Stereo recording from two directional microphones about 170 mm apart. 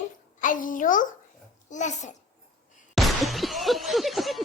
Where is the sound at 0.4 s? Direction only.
50° left (ahead or behind).